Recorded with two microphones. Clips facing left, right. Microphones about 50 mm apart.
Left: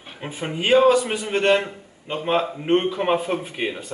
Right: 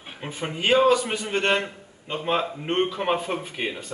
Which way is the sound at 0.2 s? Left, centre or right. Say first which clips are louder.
Left 2 dB; centre.